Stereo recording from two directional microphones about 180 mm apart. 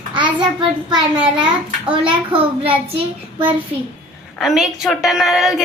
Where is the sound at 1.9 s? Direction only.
30° right (ahead or behind).